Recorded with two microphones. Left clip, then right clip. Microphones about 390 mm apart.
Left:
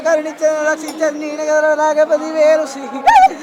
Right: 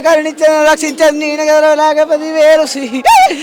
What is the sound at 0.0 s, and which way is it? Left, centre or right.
Speech, right.